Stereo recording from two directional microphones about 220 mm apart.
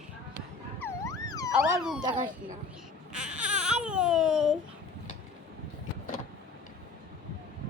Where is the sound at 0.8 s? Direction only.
15° left (ahead or behind).